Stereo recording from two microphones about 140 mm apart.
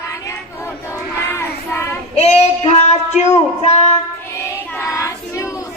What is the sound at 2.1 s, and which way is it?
Child singing, 50° left (ahead or behind).